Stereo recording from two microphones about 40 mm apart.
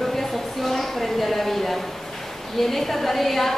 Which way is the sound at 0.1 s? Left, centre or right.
Centre.